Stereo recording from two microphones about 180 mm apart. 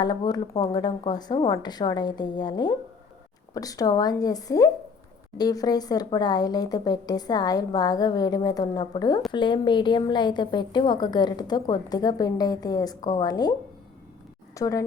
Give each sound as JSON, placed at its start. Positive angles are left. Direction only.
{"t": 0.0, "sound": "a woman's voice", "side_deg": 25}
{"t": 14.5, "sound": "a woman's voice", "side_deg": 20}